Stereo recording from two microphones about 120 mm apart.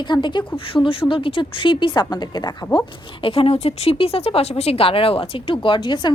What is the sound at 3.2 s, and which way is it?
Speech, 50° left (ahead or behind).